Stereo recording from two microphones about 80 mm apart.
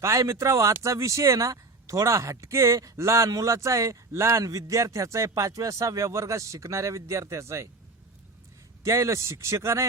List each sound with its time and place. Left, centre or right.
0.0 s speech: right
8.8 s speech: right